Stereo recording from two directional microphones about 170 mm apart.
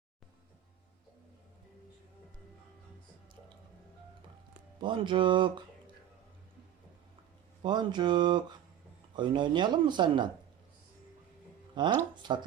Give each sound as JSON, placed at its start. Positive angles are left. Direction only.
{"t": 4.8, "sound": "speech", "side_deg": -30}
{"t": 7.6, "sound": "speech", "side_deg": -25}
{"t": 11.7, "sound": "speech", "side_deg": -25}